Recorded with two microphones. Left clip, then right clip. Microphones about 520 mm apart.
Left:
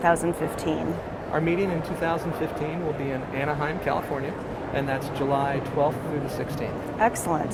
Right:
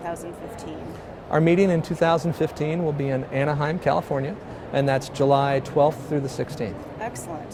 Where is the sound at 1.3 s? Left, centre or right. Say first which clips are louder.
Right 6 dB; right.